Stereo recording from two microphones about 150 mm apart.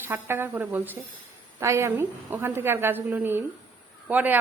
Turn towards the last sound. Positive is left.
turn(degrees=-10)  # may be behind; listen again after turning